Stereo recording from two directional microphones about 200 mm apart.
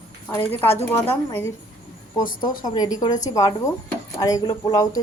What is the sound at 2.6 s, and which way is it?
Speech, 20° left (ahead or behind).